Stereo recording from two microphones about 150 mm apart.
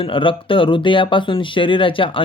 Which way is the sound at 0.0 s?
35° left (ahead or behind).